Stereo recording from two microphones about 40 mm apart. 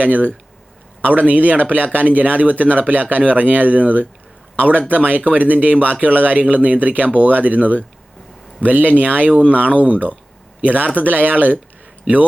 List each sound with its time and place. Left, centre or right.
0.0 s speech: right